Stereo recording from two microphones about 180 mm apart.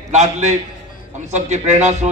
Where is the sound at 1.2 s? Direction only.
40° right (ahead or behind).